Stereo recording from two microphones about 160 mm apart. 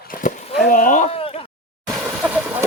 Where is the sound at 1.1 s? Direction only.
35° left (ahead or behind).